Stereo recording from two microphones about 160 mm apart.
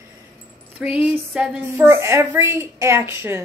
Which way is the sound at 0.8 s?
5° right (ahead or behind).